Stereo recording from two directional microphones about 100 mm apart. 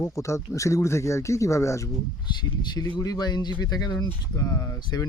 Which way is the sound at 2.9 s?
40° left (ahead or behind).